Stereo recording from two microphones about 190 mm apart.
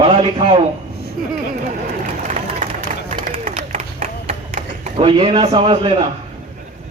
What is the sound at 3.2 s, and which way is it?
Clapping, 45° right (ahead or behind).